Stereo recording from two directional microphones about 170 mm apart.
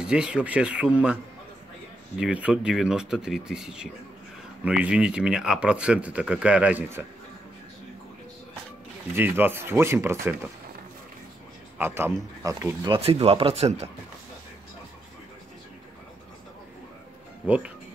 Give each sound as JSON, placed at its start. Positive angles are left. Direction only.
{"t": 0.0, "sound": "speech", "side_deg": -5}
{"t": 9.1, "sound": "speech", "side_deg": -15}
{"t": 11.8, "sound": "speech", "side_deg": -15}
{"t": 17.4, "sound": "speech", "side_deg": -10}